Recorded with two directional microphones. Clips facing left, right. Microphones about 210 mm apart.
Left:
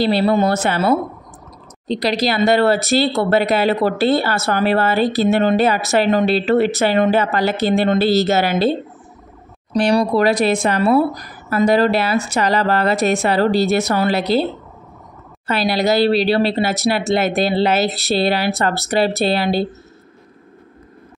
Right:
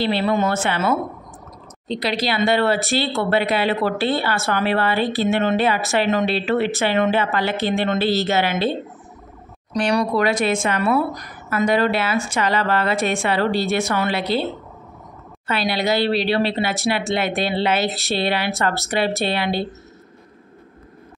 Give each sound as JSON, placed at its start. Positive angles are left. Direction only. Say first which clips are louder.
{"t": 0.0, "sound": "speech", "louder": "left 4 dB", "side_deg": 35}